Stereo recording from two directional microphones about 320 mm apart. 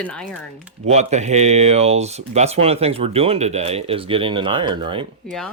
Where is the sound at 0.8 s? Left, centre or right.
Right.